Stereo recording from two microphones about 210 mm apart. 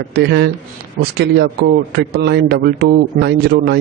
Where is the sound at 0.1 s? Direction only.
55° right (ahead or behind).